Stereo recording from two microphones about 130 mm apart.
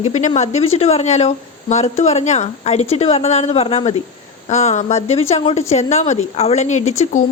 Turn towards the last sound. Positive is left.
turn(degrees=65)  # may be behind; listen again after turning